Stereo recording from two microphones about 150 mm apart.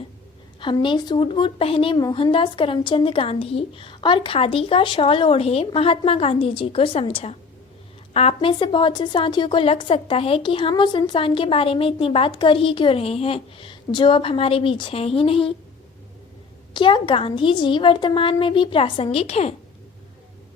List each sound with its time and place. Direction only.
0.6 s a woman's voice: 35° left (ahead or behind)
16.7 s a woman's voice: 35° left (ahead or behind)